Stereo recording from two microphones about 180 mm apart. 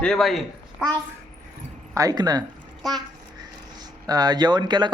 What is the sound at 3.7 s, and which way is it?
Speech, 20° right (ahead or behind).